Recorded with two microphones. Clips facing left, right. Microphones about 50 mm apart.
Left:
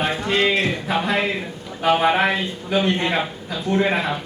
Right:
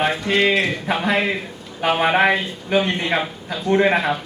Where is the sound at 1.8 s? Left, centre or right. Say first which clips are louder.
Right 1 dB; centre.